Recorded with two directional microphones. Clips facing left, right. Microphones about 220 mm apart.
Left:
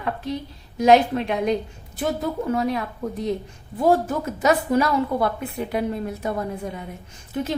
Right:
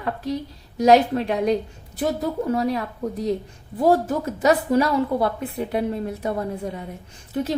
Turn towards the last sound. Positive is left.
turn(degrees=-35)  # may be behind; listen again after turning